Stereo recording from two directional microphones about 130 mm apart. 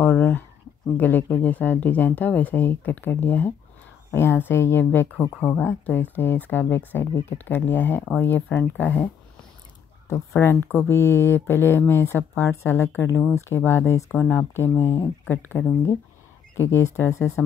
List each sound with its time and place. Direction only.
0.0 s speech: 10° left (ahead or behind)
10.4 s speech: 15° left (ahead or behind)